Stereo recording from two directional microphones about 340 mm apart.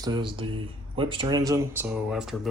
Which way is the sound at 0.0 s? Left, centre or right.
Centre.